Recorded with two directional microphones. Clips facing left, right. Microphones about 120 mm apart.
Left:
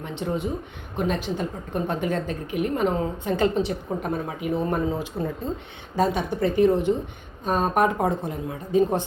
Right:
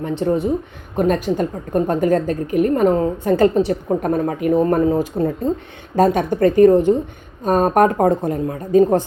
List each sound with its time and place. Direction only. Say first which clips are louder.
0.0 s a woman's voice: right 9 dB; 40° right (ahead or behind)